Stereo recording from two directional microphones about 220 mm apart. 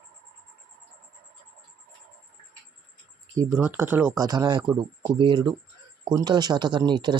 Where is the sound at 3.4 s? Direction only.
10° right (ahead or behind).